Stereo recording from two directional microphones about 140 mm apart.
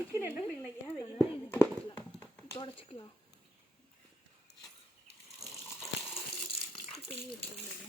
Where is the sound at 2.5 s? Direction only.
35° left (ahead or behind).